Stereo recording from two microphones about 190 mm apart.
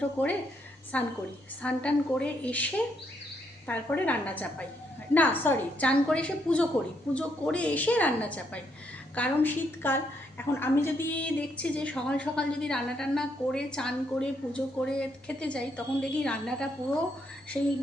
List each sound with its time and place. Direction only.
0.2 s a woman's voice: 10° left (ahead or behind)
17.5 s speech: 25° left (ahead or behind)